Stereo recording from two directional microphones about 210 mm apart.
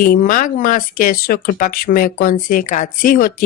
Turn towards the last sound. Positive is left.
turn(degrees=40)  # may be behind; listen again after turning